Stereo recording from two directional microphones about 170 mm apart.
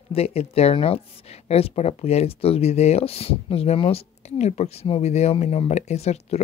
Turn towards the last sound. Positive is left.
turn(degrees=40)  # may be behind; listen again after turning